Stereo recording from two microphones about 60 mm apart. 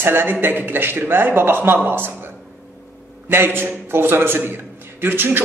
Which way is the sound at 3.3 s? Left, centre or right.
Right.